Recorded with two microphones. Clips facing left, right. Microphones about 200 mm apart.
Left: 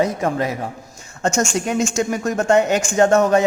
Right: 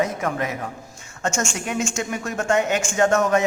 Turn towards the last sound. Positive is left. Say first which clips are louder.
# left 4 dB
turn(degrees=35)  # may be behind; listen again after turning